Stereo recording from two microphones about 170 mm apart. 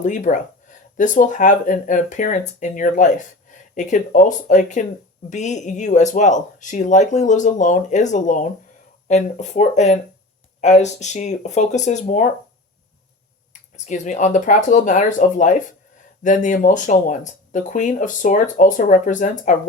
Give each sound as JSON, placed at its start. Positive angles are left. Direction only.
{"t": 0.0, "sound": "speech", "side_deg": 45}
{"t": 13.5, "sound": "speech", "side_deg": 45}